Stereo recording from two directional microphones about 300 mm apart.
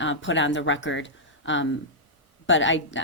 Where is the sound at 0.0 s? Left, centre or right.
Left.